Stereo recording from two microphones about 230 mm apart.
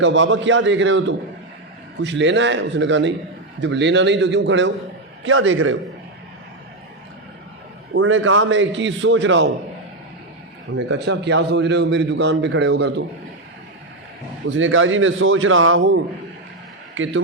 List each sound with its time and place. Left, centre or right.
0.0 s a man's voice: right
7.9 s a man's voice: right
10.8 s a man's voice: right
14.5 s a man's voice: right